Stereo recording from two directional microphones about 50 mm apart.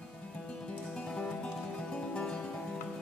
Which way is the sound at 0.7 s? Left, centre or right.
Centre.